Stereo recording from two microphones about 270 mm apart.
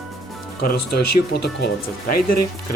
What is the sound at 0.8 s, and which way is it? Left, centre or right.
Speech, left.